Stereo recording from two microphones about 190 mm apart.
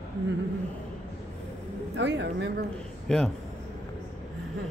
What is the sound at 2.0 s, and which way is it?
Speech, 65° right (ahead or behind).